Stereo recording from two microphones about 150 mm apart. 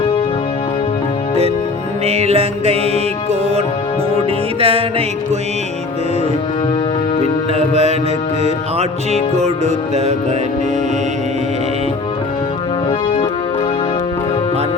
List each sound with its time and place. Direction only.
2.0 s music: 45° right (ahead or behind)
4.6 s music: 40° right (ahead or behind)
7.5 s music: 45° right (ahead or behind)
9.4 s music: 45° right (ahead or behind)